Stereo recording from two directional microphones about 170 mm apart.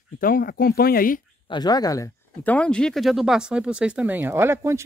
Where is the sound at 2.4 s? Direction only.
5° left (ahead or behind).